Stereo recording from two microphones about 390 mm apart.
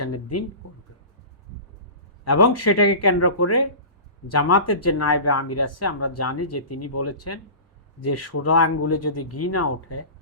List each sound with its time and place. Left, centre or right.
0.0 s speech: left
2.2 s speech: left